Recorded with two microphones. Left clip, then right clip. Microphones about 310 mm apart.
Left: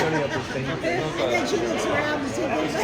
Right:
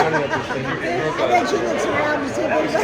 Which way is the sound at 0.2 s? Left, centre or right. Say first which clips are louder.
Right 5 dB; centre.